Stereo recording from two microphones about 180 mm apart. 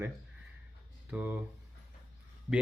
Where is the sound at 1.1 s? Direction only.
10° right (ahead or behind).